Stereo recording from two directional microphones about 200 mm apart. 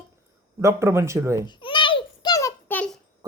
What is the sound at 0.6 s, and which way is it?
Speech, 15° right (ahead or behind).